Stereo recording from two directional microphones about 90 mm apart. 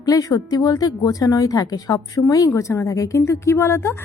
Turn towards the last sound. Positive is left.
turn(degrees=30)  # may be behind; listen again after turning